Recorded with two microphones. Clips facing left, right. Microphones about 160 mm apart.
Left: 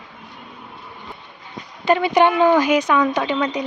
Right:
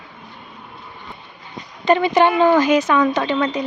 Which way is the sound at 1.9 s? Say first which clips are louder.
Right 1 dB; 10° left (ahead or behind).